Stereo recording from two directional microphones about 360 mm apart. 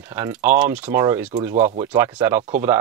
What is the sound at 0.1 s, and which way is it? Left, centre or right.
Speech, centre.